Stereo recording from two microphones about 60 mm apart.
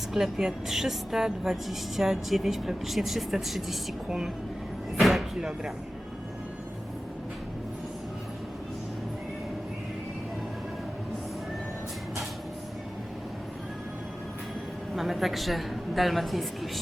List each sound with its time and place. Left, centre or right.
0.1 s a woman's voice: centre
4.9 s door: centre
14.9 s a woman's voice: centre